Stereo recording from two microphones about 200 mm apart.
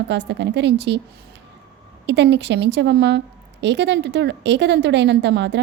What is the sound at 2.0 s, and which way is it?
A woman's voice, 60° right (ahead or behind).